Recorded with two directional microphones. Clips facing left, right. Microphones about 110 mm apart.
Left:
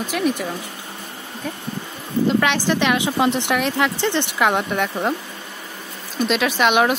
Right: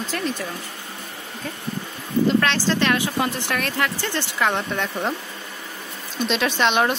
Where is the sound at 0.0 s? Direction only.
15° left (ahead or behind).